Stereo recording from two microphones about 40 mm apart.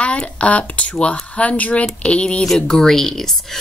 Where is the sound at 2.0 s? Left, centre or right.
Left.